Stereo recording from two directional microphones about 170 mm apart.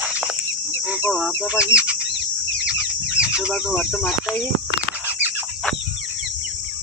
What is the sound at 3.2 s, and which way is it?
Chicken, 5° right (ahead or behind).